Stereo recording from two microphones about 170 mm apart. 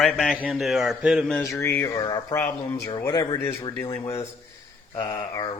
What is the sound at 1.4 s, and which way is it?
Mantra, 15° left (ahead or behind).